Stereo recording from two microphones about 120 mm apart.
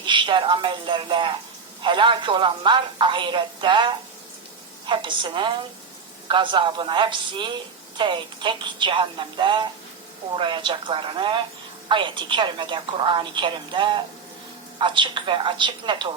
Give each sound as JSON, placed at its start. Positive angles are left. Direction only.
{"t": 0.0, "sound": "a woman's voice", "side_deg": -40}